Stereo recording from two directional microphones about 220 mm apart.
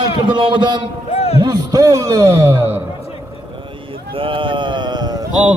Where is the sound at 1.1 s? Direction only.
30° left (ahead or behind).